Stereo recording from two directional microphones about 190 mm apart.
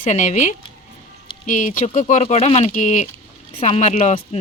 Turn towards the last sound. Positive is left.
turn(degrees=30)  # may be behind; listen again after turning